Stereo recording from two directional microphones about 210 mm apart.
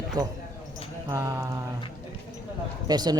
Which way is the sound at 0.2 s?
20° right (ahead or behind).